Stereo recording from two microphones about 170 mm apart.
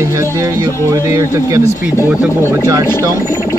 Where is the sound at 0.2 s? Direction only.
20° right (ahead or behind).